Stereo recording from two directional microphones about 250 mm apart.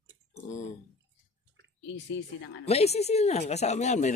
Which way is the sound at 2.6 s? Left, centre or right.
Left.